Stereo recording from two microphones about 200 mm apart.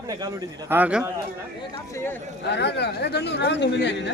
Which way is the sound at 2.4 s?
55° left (ahead or behind).